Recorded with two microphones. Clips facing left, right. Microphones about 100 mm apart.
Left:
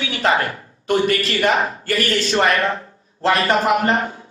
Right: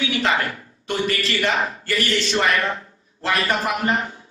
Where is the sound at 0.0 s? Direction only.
35° left (ahead or behind).